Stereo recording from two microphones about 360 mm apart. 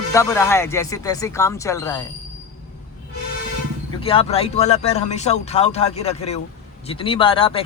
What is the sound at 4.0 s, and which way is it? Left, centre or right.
Speech, centre.